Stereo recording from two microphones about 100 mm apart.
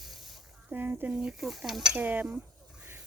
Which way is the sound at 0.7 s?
20° right (ahead or behind).